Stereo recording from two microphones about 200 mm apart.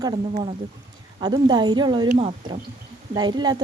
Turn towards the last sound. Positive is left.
turn(degrees=-20)  # may be behind; listen again after turning